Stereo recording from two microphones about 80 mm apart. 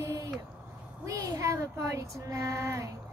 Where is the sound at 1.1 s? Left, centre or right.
Right.